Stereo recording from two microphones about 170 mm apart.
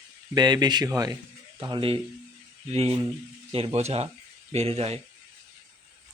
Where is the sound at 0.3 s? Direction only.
25° right (ahead or behind).